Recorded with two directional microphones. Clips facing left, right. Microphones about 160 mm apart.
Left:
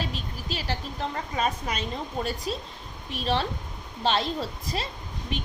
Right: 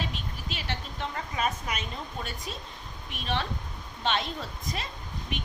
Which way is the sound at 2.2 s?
35° left (ahead or behind).